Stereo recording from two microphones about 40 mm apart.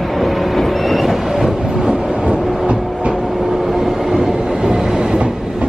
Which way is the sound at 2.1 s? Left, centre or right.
Right.